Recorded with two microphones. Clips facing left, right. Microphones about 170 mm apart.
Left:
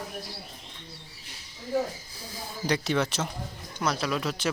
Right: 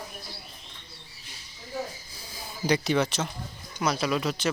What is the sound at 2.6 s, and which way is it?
Speech, centre (ahead or behind).